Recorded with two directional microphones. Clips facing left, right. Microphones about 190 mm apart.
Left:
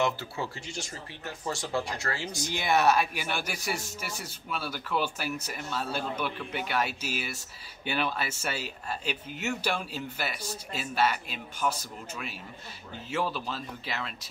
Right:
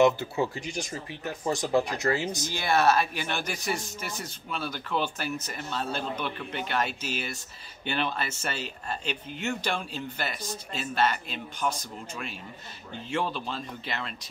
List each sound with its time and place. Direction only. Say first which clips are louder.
0.0 s speech: right 7 dB; 20° right (ahead or behind)
2.5 s speech: even; 15° left (ahead or behind)